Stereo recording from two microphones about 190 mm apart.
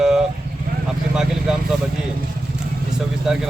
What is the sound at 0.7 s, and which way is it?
Vehicle, 50° right (ahead or behind).